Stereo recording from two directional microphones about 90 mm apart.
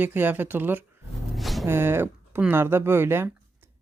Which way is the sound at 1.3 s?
Centre (ahead or behind).